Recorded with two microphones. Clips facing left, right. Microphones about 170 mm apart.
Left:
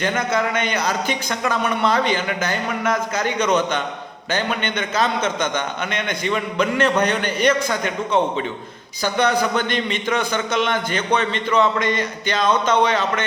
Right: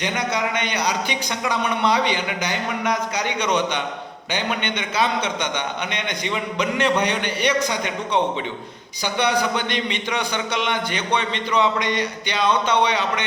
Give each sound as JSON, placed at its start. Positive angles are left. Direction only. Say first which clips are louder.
{"t": 0.0, "sound": "a man's voice", "louder": "left 3 dB", "side_deg": -15}
{"t": 9.2, "sound": "a man's voice", "louder": "left 2 dB", "side_deg": -15}